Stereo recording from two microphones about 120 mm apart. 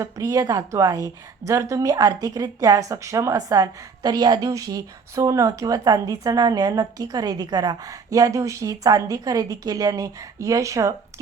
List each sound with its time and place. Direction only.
0.0 s a woman's voice: 30° right (ahead or behind)